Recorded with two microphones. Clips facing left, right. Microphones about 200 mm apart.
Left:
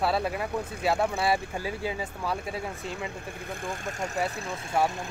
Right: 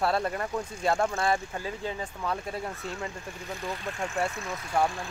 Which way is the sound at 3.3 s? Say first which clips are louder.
Even; 55° left (ahead or behind).